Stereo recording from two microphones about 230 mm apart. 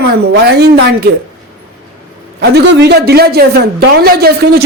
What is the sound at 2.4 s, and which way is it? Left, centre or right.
A man's voice, right.